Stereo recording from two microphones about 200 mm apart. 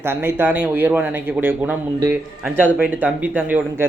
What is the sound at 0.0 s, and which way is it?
Speech, 10° right (ahead or behind).